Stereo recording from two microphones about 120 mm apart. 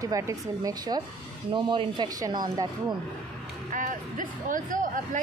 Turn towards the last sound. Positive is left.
turn(degrees=-90)